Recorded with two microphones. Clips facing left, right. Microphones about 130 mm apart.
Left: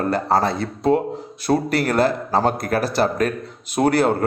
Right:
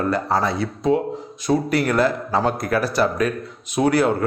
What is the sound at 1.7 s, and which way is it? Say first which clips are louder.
A man's voice: even; 35° left (ahead or behind).